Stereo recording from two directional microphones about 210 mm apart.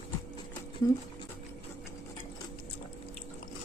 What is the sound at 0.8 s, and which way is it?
Speech, 20° left (ahead or behind).